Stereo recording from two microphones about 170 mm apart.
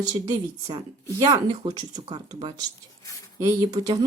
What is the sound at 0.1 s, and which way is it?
Speech, 25° right (ahead or behind).